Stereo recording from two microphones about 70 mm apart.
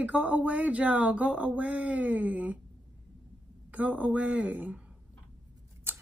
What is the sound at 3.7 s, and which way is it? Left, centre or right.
Speech, right.